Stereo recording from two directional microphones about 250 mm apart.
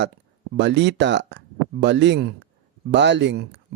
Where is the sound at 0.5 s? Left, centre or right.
Right.